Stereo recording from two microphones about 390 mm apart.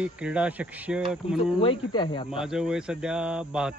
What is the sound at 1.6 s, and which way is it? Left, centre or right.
Speech, centre.